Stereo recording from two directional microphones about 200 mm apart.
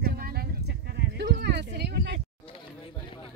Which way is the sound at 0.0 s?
50° right (ahead or behind).